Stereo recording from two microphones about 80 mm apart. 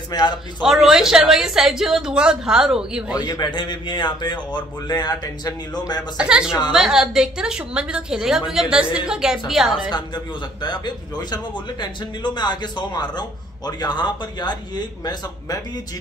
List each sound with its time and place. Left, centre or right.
0.1 s a man's voice: left
0.6 s a woman's voice: centre
3.2 s speech: left
3.5 s speech: left
6.1 s a woman's voice: centre
9.8 s a man's voice: left
15.0 s speech: left